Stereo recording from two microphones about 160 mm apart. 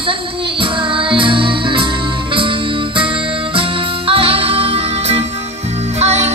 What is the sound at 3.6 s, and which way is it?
Music, 35° right (ahead or behind).